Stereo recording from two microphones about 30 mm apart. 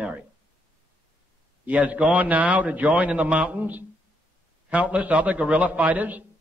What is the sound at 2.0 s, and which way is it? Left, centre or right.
A man's voice, right.